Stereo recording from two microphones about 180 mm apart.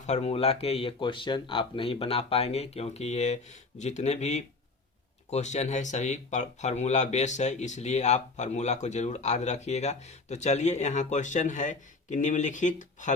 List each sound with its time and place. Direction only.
0.0 s speech: 40° left (ahead or behind)